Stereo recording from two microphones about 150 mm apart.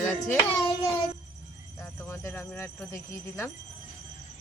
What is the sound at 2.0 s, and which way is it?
Speech, 15° left (ahead or behind).